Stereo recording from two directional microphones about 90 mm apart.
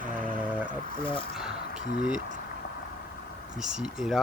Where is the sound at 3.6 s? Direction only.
5° right (ahead or behind).